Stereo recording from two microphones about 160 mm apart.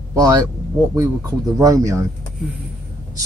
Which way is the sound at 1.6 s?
20° right (ahead or behind).